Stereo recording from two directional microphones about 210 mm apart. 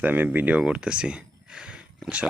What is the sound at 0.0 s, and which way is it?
Speech, 10° right (ahead or behind).